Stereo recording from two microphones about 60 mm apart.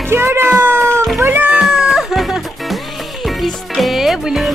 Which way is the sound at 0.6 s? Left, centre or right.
Right.